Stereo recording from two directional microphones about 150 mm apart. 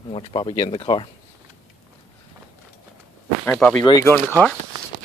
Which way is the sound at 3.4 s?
10° left (ahead or behind).